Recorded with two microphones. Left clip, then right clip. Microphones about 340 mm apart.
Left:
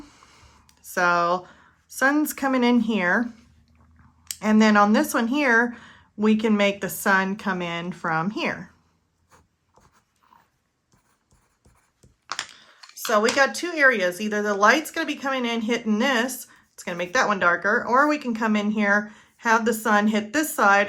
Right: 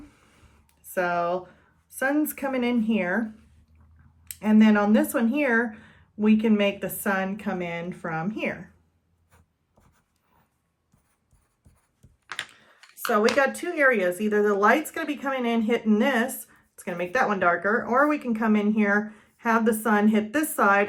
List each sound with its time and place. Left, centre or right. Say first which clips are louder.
0.7 s a sound: left 5 dB; centre
2.0 s speech: left 4 dB; centre
13.1 s speech: left 2 dB; centre